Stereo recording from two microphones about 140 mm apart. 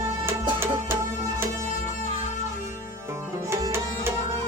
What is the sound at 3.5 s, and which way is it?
Music, 20° right (ahead or behind).